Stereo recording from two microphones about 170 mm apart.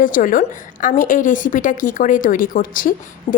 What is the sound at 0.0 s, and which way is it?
A woman's voice, 55° left (ahead or behind).